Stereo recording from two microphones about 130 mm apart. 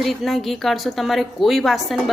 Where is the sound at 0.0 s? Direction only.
Centre (ahead or behind).